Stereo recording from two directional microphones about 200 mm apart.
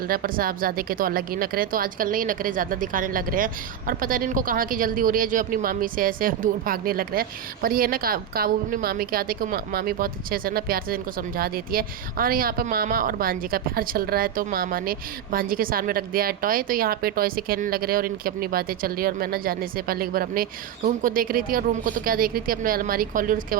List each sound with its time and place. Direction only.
0.1 s speech: 45° right (ahead or behind)